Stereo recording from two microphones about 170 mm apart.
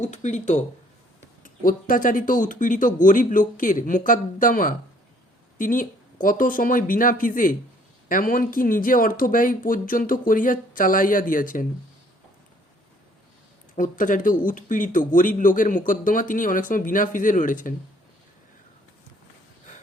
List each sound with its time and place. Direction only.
0.1 s speech: 45° left (ahead or behind)
1.6 s speech: 55° left (ahead or behind)
13.7 s speech: 50° left (ahead or behind)